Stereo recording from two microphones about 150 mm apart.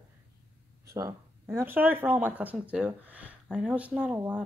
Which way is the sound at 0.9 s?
20° right (ahead or behind).